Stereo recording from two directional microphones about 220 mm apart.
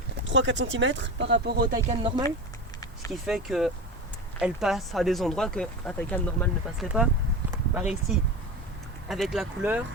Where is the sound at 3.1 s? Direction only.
Centre (ahead or behind).